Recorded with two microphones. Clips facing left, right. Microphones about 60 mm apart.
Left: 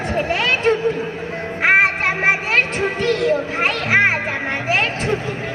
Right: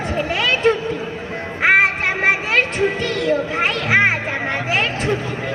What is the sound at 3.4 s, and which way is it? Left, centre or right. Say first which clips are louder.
Music: even; centre.